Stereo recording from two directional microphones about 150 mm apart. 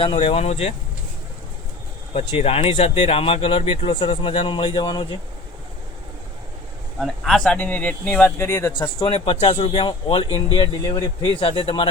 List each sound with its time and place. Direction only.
0.0 s speech: 40° left (ahead or behind)
2.1 s speech: 45° left (ahead or behind); by 5.0 s 30° left (ahead or behind)
7.0 s speech: 5° left (ahead or behind)
9.0 s speech: 35° left (ahead or behind)